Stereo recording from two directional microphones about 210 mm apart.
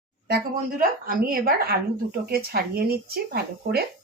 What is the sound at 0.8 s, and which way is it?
A woman's voice, 45° right (ahead or behind).